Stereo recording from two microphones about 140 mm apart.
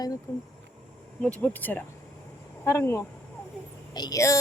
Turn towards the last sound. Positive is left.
turn(degrees=20)  # may be behind; listen again after turning